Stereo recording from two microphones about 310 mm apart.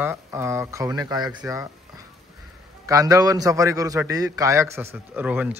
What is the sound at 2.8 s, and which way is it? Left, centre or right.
A man's voice, centre.